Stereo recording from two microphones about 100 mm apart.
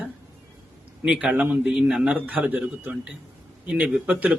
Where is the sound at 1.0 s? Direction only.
10° right (ahead or behind).